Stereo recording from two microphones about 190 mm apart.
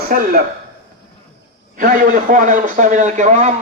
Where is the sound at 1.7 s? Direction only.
45° right (ahead or behind).